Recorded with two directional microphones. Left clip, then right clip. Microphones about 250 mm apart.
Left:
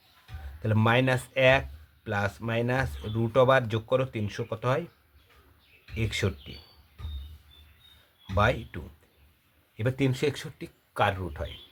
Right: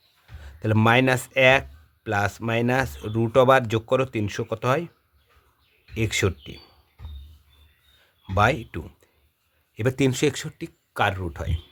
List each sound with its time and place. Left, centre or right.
0.4 s speech: right
5.9 s speech: right
8.4 s speech: right